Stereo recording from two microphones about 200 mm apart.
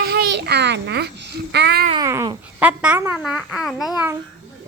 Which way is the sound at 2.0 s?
15° right (ahead or behind).